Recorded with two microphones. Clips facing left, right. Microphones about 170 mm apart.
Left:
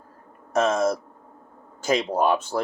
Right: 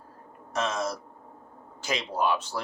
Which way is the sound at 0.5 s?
50° left (ahead or behind).